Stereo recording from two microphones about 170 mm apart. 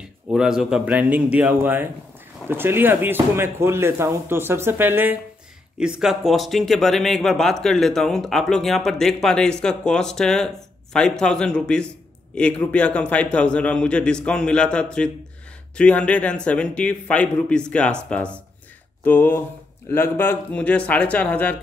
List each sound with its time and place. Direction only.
0.3 s a man's voice: 5° right (ahead or behind)